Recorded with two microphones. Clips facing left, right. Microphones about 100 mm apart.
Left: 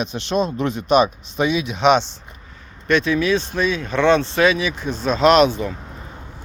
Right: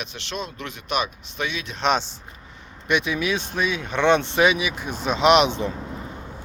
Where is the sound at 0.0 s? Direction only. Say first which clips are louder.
Left 11 dB; 20° left (ahead or behind).